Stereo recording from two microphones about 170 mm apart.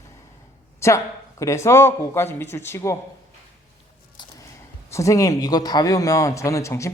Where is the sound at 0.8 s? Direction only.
15° left (ahead or behind).